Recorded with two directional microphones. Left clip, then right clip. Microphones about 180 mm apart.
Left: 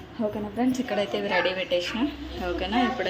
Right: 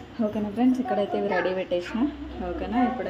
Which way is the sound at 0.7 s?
15° right (ahead or behind).